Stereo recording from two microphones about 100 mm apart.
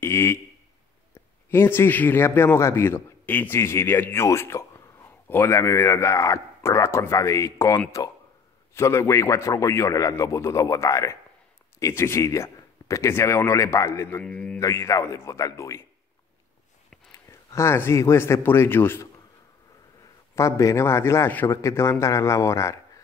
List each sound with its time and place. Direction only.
0.0 s a man's voice: 25° left (ahead or behind)
1.5 s a man's voice: 25° left (ahead or behind)
14.2 s a man's voice: 10° left (ahead or behind)
14.6 s speech: 30° left (ahead or behind)
17.1 s a man's voice: 30° left (ahead or behind)
20.3 s speech: 30° left (ahead or behind)